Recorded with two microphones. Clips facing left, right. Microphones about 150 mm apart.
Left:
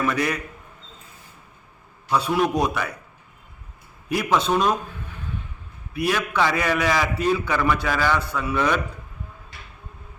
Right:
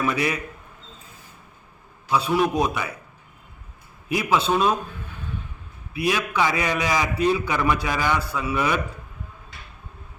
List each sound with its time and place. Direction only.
0.0 s a man's voice: 10° right (ahead or behind)
2.0 s a man's voice: 5° right (ahead or behind)
4.1 s a man's voice: 5° right (ahead or behind)
6.0 s a man's voice: 10° right (ahead or behind)